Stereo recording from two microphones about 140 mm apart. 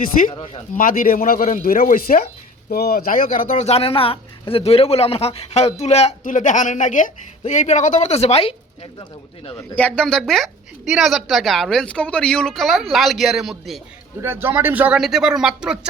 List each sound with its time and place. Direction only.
0.0 s speech: 75° left (ahead or behind)
0.3 s a man's voice: 40° left (ahead or behind)
0.8 s speech: 80° left
3.6 s a man's voice: 50° left (ahead or behind)
6.2 s speech: 65° left (ahead or behind); by 9.6 s 45° left (ahead or behind)
9.7 s speech: 10° left (ahead or behind)
14.2 s speech: 15° right (ahead or behind)